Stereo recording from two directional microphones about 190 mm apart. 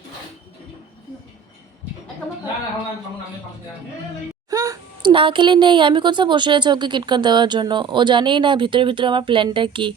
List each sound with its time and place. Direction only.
4.4 s speech: 20° right (ahead or behind)